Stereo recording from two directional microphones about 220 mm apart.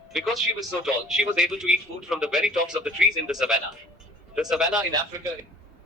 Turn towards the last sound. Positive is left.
turn(degrees=-15)  # may be behind; listen again after turning